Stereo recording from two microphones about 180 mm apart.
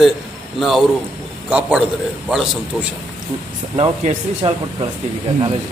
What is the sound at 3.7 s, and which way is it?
Speech, 35° right (ahead or behind).